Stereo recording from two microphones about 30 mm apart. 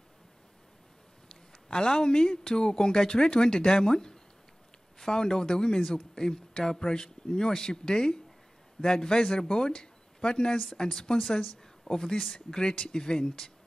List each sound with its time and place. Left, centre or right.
1.7 s speech: left